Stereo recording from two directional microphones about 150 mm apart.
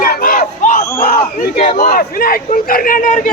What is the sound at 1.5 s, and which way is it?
A man's voice, 90° left.